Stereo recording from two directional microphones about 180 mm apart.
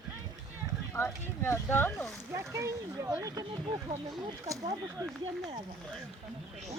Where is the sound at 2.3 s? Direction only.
15° right (ahead or behind).